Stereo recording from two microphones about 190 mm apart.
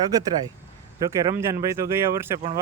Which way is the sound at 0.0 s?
20° right (ahead or behind).